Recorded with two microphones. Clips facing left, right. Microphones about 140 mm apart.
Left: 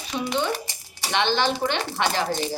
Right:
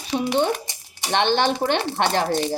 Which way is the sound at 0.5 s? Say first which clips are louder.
Even; 15° right (ahead or behind).